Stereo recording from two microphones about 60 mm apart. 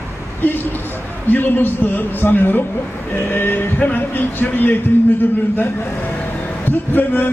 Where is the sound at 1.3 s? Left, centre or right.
Left.